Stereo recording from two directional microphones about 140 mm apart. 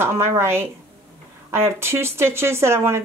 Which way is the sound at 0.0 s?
20° right (ahead or behind).